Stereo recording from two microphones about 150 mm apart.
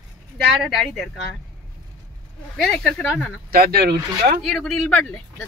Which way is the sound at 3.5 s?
90° right.